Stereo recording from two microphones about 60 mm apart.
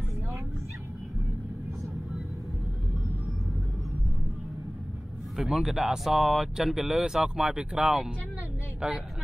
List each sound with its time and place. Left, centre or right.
5.4 s speech: centre
8.8 s speech: right